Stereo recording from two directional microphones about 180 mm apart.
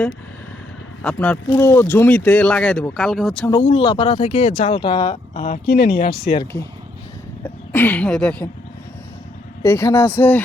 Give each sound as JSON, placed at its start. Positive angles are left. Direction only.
{"t": 1.0, "sound": "speech", "side_deg": 5}
{"t": 3.6, "sound": "speech", "side_deg": 40}
{"t": 5.5, "sound": "speech", "side_deg": 65}
{"t": 7.4, "sound": "speech", "side_deg": 10}
{"t": 9.6, "sound": "speech", "side_deg": 15}